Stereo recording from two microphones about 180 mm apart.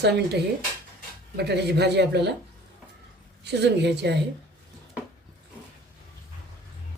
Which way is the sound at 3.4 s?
70° right (ahead or behind).